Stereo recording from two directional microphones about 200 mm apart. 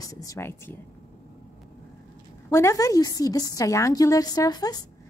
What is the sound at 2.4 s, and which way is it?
A woman's voice, 15° left (ahead or behind).